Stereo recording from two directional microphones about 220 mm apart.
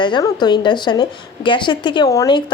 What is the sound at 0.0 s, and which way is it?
Speech, 20° left (ahead or behind).